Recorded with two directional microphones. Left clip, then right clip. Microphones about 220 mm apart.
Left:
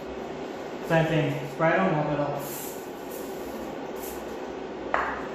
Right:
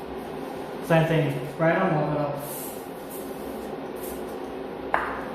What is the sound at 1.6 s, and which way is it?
Speech, 5° right (ahead or behind).